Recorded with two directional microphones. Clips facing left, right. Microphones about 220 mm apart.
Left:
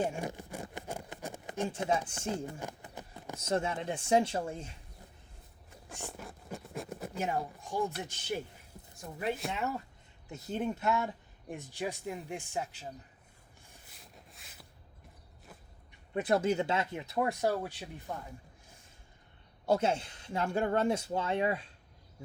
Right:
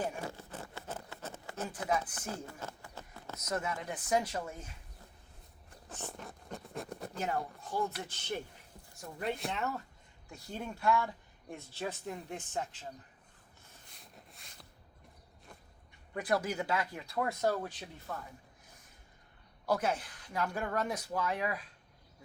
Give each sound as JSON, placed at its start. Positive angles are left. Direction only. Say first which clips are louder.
{"t": 0.0, "sound": "a sound", "louder": "left 4 dB", "side_deg": 20}
{"t": 1.6, "sound": "speech", "louder": "left 3 dB", "side_deg": 25}
{"t": 3.3, "sound": "speech", "louder": "left 4 dB", "side_deg": 30}
{"t": 6.1, "sound": "a sound", "louder": "left 2 dB", "side_deg": 0}
{"t": 7.3, "sound": "speech", "louder": "left 2 dB", "side_deg": 15}
{"t": 10.2, "sound": "speech", "louder": "left 7 dB", "side_deg": 20}
{"t": 14.0, "sound": "a sound", "louder": "even", "side_deg": 0}
{"t": 16.1, "sound": "speech", "louder": "left 5 dB", "side_deg": 25}
{"t": 19.6, "sound": "speech", "louder": "left 3 dB", "side_deg": 25}